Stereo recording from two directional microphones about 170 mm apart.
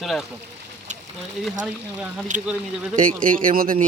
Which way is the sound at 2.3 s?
45° right (ahead or behind).